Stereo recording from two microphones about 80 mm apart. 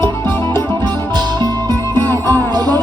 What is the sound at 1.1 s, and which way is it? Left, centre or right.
Music, right.